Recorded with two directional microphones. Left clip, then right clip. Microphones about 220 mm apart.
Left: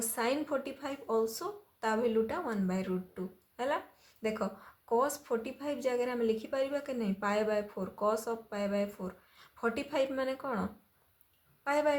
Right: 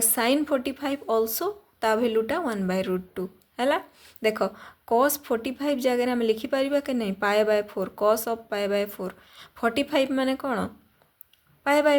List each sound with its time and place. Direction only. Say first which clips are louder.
0.1 s a woman's voice: right 9 dB; 40° right (ahead or behind)